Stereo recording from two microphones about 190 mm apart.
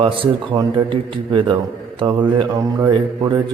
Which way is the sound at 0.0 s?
25° right (ahead or behind).